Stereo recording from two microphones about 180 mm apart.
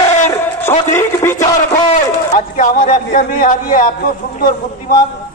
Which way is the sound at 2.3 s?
45° left (ahead or behind).